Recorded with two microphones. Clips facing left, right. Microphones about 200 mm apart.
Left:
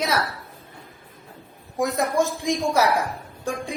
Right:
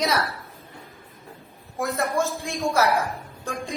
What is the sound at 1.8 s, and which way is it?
A woman's voice, 15° left (ahead or behind).